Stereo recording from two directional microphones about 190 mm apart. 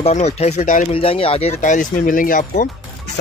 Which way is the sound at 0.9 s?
30° left (ahead or behind).